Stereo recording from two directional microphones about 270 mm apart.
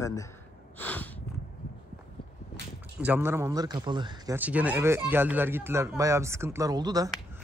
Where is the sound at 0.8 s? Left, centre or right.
Centre.